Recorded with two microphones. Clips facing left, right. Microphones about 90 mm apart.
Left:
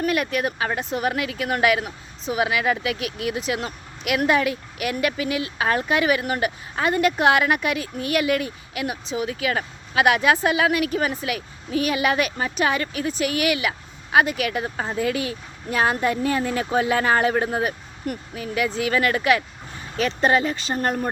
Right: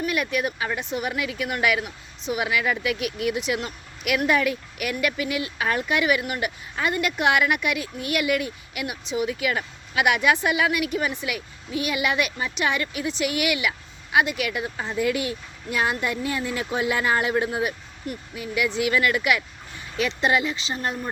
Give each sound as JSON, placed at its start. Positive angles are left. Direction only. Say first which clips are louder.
{"t": 0.0, "sound": "speech", "louder": "left 2 dB", "side_deg": 35}